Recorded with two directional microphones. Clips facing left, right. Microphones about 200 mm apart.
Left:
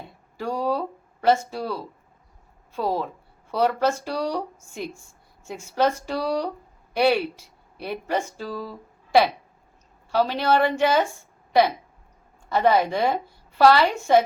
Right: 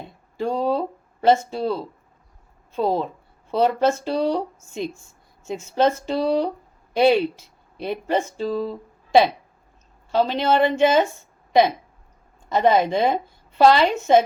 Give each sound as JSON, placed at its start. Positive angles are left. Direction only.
{"t": 0.3, "sound": "a woman's voice", "side_deg": -25}
{"t": 12.5, "sound": "a woman's voice", "side_deg": -20}